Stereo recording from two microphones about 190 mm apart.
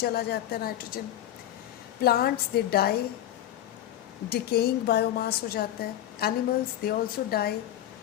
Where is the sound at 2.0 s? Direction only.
55° left (ahead or behind).